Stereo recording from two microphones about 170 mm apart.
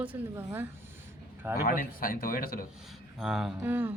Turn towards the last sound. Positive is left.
turn(degrees=-10)  # may be behind; listen again after turning